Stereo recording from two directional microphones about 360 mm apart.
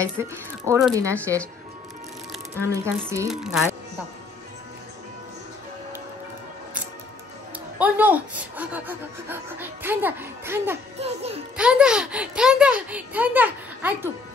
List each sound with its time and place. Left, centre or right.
0.0 s speech: centre
2.6 s speech: centre
7.8 s speech: centre
11.5 s speech: centre